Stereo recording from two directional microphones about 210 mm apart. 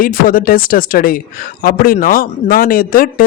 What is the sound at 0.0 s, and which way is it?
Speech, 40° left (ahead or behind).